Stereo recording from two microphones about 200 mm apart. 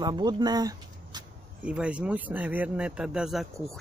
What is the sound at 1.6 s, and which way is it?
Speech, 5° right (ahead or behind).